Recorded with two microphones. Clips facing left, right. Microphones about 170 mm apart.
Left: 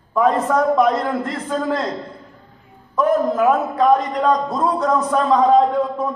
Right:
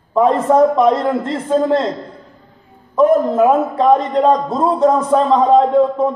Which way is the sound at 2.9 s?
25° right (ahead or behind).